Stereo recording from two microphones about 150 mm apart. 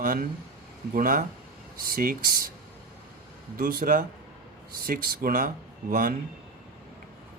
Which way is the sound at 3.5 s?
75° right (ahead or behind).